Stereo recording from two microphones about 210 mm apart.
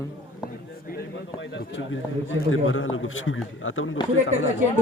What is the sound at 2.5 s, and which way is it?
A man's voice, 70° left (ahead or behind).